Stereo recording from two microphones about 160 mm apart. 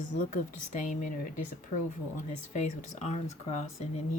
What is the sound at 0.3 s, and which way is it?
Speech, 50° left (ahead or behind).